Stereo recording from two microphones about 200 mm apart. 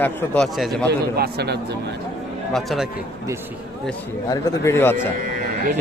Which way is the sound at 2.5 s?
Centre (ahead or behind).